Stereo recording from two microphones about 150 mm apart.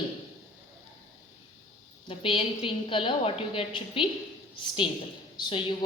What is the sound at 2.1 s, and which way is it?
A woman's voice, 35° left (ahead or behind).